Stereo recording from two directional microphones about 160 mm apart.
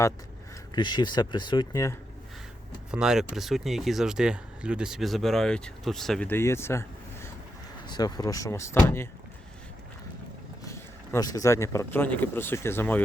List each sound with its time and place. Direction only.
0.8 s speech: 25° left (ahead or behind)
2.9 s speech: 5° right (ahead or behind); by 9.0 s 15° left (ahead or behind)
10.6 s speech: 20° left (ahead or behind)